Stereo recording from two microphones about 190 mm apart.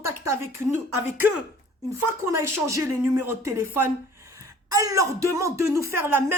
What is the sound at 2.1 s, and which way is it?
Speech, 15° right (ahead or behind).